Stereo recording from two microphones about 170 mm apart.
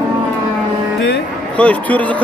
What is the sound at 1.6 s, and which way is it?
Speech, 10° left (ahead or behind).